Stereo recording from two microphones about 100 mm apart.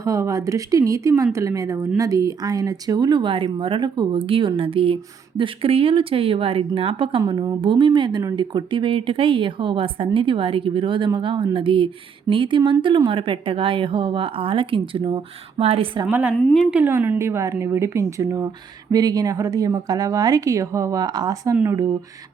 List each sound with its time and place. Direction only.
0.0 s a woman's voice: 30° right (ahead or behind); by 7.2 s 65° right (ahead or behind)
7.3 s a woman's voice: 50° right (ahead or behind)
15.6 s a woman's voice: 90° right
16.0 s a woman's voice: 15° right (ahead or behind)
16.3 s a woman's voice: 10° left (ahead or behind)
16.7 s a woman's voice: 20° right (ahead or behind); by 21.5 s 40° right (ahead or behind)
21.5 s speech: 20° right (ahead or behind)